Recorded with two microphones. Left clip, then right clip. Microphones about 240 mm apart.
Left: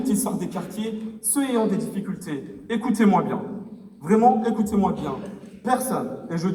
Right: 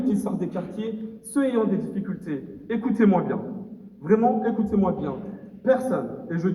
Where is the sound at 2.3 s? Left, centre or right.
Left.